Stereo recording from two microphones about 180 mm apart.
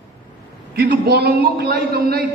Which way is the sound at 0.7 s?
60° right (ahead or behind).